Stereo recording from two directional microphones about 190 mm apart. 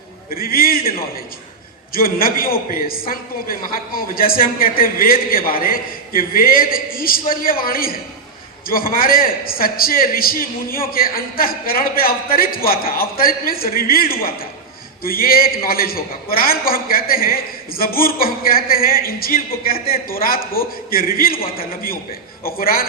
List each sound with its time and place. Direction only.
0.3 s a woman's voice: 50° left (ahead or behind)
21.4 s a man's voice: 30° left (ahead or behind)
22.5 s a woman's voice: 50° left (ahead or behind)